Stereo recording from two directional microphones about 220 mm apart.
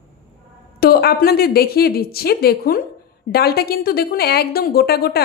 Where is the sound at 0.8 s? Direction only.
45° left (ahead or behind).